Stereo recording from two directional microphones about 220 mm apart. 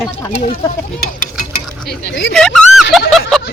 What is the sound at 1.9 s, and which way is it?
Speech, 50° left (ahead or behind).